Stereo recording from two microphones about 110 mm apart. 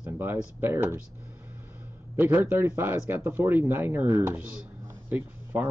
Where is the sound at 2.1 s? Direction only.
20° right (ahead or behind).